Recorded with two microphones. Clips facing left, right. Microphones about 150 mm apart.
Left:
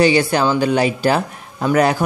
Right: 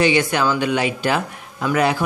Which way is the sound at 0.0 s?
35° left (ahead or behind).